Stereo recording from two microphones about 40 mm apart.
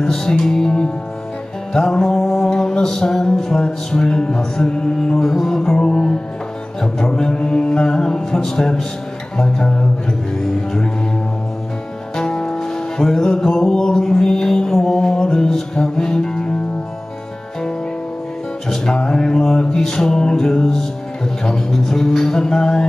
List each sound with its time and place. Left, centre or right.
0.0 s music: centre
5.8 s music: left
7.2 s music: centre
12.2 s music: centre
18.9 s a sound: centre
19.7 s music: centre